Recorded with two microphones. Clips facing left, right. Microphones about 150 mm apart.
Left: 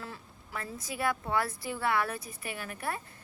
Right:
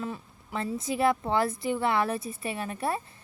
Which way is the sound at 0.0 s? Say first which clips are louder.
Right 8 dB; 20° right (ahead or behind).